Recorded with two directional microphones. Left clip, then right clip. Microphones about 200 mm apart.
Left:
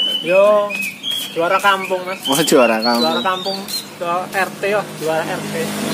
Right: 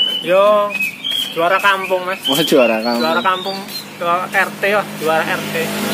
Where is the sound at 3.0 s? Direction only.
20° left (ahead or behind).